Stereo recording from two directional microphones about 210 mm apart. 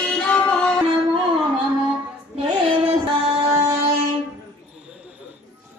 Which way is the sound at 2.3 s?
25° right (ahead or behind).